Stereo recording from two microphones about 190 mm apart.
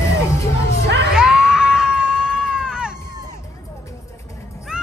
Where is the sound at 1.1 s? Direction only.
5° right (ahead or behind).